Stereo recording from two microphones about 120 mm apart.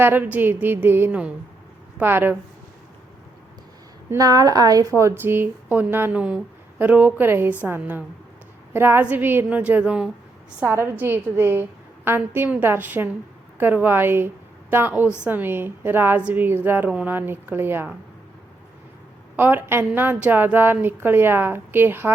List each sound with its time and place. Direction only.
0.0 s a woman's voice: 15° right (ahead or behind)
4.1 s a woman's voice: 30° right (ahead or behind)
19.4 s a woman's voice: 15° right (ahead or behind)